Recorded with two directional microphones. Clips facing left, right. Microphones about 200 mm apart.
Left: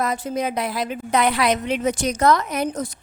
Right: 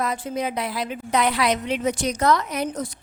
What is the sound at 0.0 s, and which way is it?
A woman's voice, 45° left (ahead or behind).